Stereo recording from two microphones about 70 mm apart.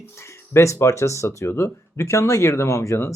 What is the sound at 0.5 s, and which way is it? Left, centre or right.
Speech, left.